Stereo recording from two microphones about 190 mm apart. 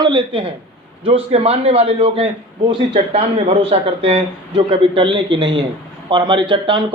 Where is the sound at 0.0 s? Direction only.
20° right (ahead or behind).